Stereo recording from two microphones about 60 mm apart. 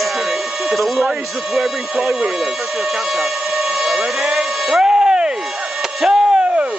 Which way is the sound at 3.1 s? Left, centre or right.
Centre.